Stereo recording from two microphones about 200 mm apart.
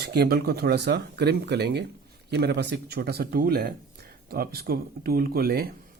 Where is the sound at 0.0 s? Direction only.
55° right (ahead or behind).